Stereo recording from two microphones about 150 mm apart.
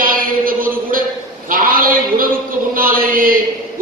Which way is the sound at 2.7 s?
70° right (ahead or behind).